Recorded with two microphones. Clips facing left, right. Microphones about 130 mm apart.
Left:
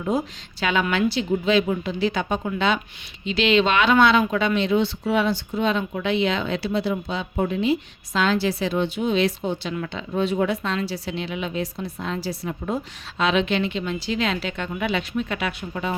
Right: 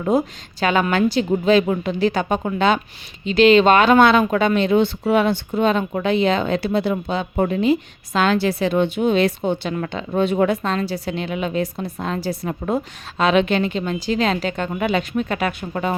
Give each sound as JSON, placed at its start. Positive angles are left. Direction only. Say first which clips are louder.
{"t": 0.6, "sound": "speech", "louder": "right 4 dB", "side_deg": -45}